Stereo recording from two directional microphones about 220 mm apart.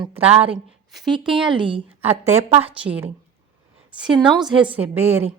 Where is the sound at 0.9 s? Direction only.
Centre (ahead or behind).